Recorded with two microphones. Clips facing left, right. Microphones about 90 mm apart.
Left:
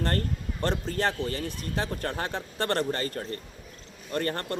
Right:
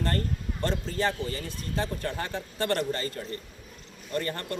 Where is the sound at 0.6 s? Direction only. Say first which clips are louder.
Left 1 dB; 55° left (ahead or behind).